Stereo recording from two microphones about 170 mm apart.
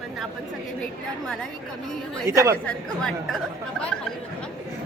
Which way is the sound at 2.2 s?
20° right (ahead or behind).